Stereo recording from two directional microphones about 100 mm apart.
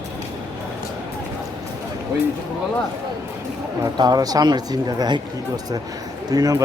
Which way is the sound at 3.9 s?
45° right (ahead or behind).